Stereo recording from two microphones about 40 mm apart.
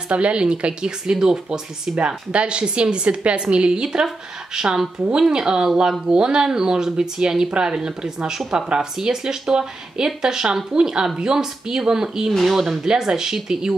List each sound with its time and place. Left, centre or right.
0.1 s speech: right
2.0 s speech: right
3.8 s speech: centre